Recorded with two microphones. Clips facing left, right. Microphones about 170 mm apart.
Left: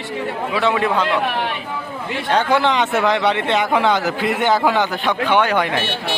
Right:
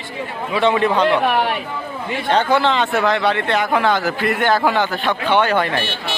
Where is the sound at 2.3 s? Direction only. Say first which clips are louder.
Even; 15° left (ahead or behind).